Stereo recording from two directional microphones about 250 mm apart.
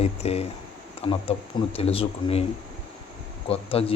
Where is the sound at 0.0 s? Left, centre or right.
Left.